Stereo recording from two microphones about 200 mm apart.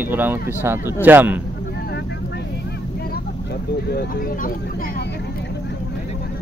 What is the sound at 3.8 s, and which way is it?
Speech, 50° left (ahead or behind).